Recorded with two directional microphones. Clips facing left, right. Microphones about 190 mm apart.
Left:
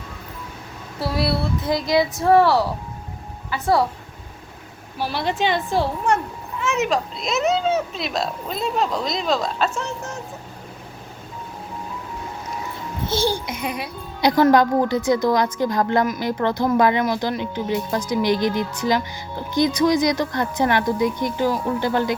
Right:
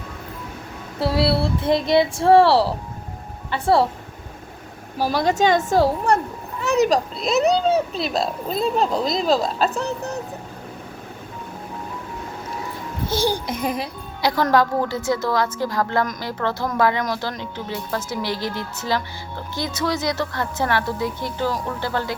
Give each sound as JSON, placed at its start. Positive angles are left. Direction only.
{"t": 0.9, "sound": "speech", "side_deg": -25}
{"t": 4.9, "sound": "a woman's voice", "side_deg": -40}
{"t": 9.0, "sound": "speech", "side_deg": 0}
{"t": 9.6, "sound": "speech", "side_deg": -35}
{"t": 13.3, "sound": "speech", "side_deg": -40}
{"t": 14.2, "sound": "a woman's voice", "side_deg": 20}